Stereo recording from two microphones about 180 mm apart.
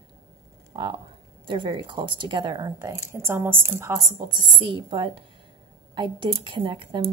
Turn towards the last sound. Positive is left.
turn(degrees=-25)  # may be behind; listen again after turning